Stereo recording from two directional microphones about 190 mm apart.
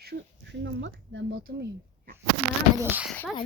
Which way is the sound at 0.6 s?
70° right (ahead or behind).